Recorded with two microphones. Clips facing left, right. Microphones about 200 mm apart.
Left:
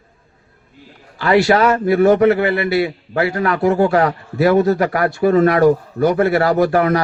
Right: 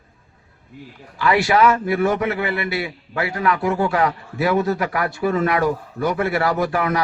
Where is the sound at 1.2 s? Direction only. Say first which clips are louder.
Left 3 dB; 40° left (ahead or behind).